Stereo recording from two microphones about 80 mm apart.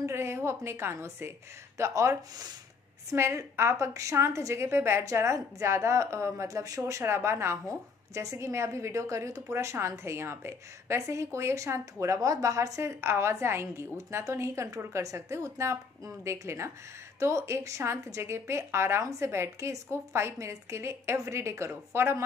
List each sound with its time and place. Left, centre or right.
0.0 s a woman's voice: right
6.9 s a woman's voice: right